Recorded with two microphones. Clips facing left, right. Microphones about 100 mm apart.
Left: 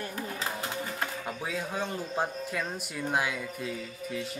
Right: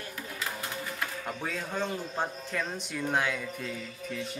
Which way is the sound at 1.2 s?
5° left (ahead or behind).